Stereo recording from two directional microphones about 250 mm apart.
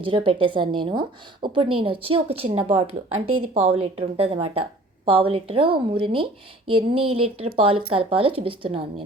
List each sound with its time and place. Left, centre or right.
0.0 s a woman's voice: right
3.2 s speech: right
3.5 s a woman's voice: right